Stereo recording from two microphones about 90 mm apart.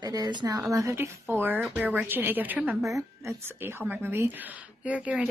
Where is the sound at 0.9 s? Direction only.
25° right (ahead or behind).